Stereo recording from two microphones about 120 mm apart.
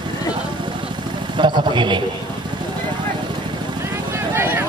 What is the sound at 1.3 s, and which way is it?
Speech, 40° right (ahead or behind).